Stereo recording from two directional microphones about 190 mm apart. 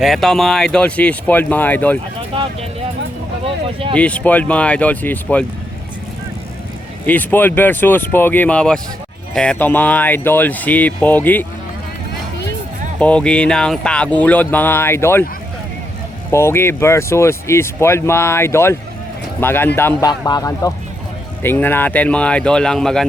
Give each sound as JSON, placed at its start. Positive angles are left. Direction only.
{"t": 0.0, "sound": "speech", "side_deg": 0}
{"t": 2.3, "sound": "speech", "side_deg": -25}
{"t": 3.4, "sound": "a sound", "side_deg": -30}
{"t": 3.9, "sound": "speech", "side_deg": 5}
{"t": 7.0, "sound": "speech", "side_deg": 10}
{"t": 13.0, "sound": "speech", "side_deg": 5}
{"t": 16.3, "sound": "speech", "side_deg": 15}